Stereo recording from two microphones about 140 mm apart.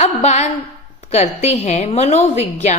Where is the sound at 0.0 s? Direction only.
50° left (ahead or behind).